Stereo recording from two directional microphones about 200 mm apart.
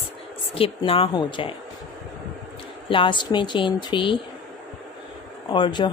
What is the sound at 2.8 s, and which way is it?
A woman's voice, 25° left (ahead or behind).